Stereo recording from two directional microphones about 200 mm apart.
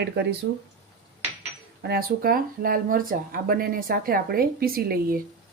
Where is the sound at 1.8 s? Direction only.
50° right (ahead or behind).